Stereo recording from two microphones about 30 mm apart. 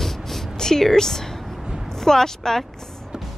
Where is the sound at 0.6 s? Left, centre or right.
Centre.